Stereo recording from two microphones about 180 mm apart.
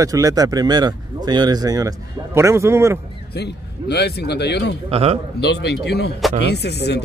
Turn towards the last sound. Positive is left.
turn(degrees=65)  # may be behind; listen again after turning